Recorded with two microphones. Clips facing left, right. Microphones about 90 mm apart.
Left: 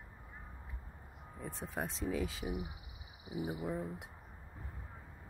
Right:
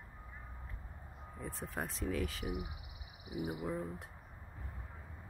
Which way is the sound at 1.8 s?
5° left (ahead or behind).